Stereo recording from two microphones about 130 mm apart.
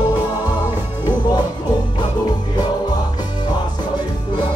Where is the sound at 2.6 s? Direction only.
30° left (ahead or behind).